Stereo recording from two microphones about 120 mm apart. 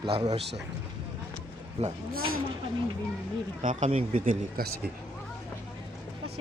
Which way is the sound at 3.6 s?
70° right (ahead or behind).